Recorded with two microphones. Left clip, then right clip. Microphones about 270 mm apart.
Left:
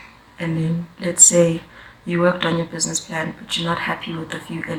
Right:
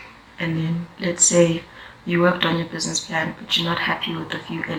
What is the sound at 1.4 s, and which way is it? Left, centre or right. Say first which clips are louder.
Speech: left 1 dB; left.